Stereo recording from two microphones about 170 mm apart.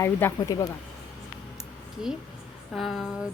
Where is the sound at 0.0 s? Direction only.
15° left (ahead or behind).